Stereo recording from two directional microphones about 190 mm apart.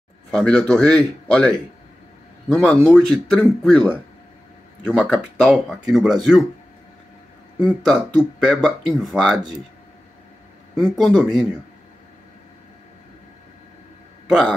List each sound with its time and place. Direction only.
0.3 s speech: 5° left (ahead or behind)
2.5 s speech: centre (ahead or behind)
7.5 s speech: 5° left (ahead or behind)
10.8 s speech: centre (ahead or behind)